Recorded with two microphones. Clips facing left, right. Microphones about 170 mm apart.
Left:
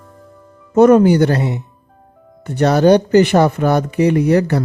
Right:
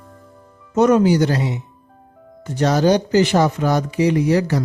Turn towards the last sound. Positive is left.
turn(degrees=60)  # may be behind; listen again after turning